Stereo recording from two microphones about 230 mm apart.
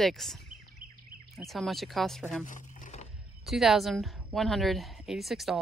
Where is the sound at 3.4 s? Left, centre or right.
Centre.